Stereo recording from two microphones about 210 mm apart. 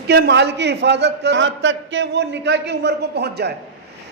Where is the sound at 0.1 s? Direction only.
50° right (ahead or behind).